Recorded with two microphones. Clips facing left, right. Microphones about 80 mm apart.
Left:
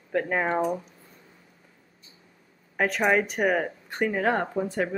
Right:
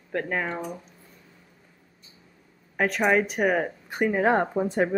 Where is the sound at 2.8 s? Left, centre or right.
Centre.